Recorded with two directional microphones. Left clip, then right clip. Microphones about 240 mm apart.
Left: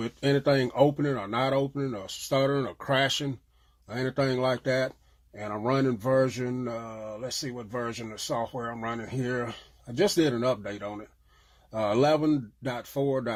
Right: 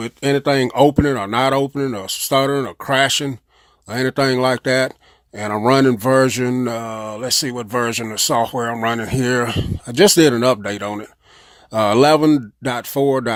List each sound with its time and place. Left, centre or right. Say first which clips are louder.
0.0 s speech: right 8 dB; right